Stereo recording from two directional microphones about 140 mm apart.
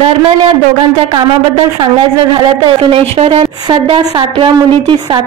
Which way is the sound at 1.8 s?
35° right (ahead or behind).